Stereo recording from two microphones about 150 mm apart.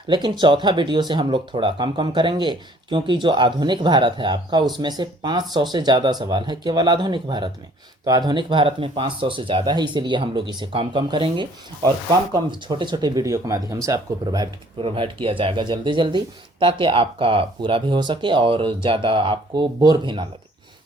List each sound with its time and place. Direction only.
0.1 s speech: 30° right (ahead or behind)
14.8 s speech: 35° right (ahead or behind)